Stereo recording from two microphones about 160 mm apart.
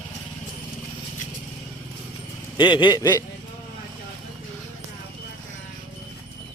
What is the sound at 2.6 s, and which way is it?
Speech, 30° left (ahead or behind).